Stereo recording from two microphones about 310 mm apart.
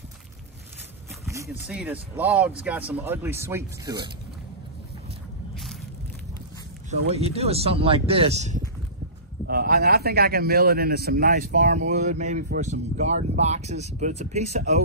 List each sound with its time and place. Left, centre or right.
1.2 s speech: centre
5.5 s a sound: centre
6.9 s a man's voice: centre